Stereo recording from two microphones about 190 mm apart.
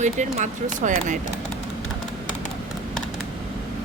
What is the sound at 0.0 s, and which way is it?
Speech, 40° right (ahead or behind).